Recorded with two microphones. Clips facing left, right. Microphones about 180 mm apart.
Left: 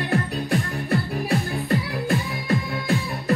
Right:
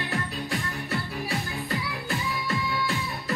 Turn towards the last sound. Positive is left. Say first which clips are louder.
# left 7 dB
turn(degrees=50)  # may be behind; listen again after turning